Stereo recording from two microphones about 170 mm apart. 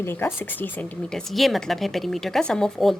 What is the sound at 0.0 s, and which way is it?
A woman's voice, 15° left (ahead or behind).